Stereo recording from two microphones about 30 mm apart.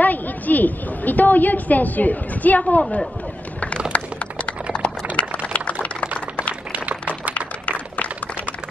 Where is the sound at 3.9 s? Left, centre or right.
Left.